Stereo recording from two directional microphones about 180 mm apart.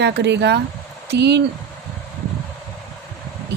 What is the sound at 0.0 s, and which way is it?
Speech, 70° right (ahead or behind).